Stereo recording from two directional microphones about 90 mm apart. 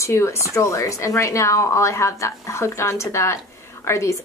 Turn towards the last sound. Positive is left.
turn(degrees=30)  # may be behind; listen again after turning